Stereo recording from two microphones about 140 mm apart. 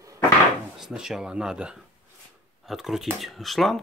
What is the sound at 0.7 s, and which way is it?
Speech, 5° right (ahead or behind).